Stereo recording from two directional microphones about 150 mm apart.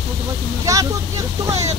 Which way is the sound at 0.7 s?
20° right (ahead or behind).